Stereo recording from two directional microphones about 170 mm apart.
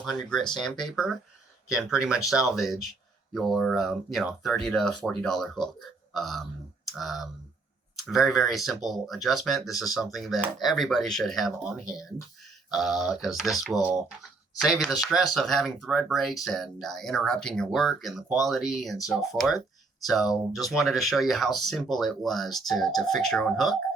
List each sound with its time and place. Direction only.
0.0 s speech: centre (ahead or behind)